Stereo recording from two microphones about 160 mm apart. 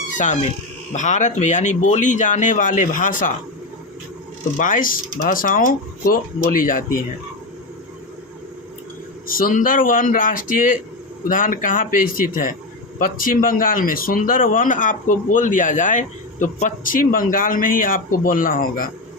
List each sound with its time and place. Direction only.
0.9 s speech: 50° left (ahead or behind)
4.5 s speech: 55° left (ahead or behind)
9.2 s speech: 60° left (ahead or behind)